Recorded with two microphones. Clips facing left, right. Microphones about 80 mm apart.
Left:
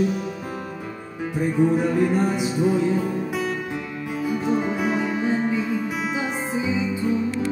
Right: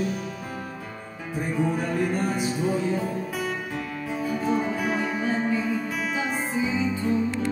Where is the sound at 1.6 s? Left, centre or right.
Centre.